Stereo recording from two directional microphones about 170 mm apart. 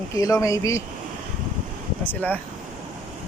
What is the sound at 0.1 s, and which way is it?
Speech, 20° left (ahead or behind).